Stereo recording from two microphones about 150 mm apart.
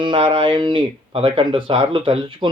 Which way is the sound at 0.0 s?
35° right (ahead or behind).